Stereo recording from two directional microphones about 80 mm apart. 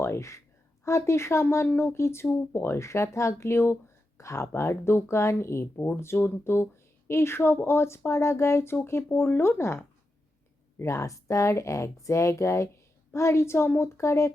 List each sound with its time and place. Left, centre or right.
0.0 s speech: left